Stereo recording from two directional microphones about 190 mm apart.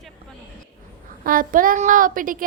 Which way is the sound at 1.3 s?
45° right (ahead or behind).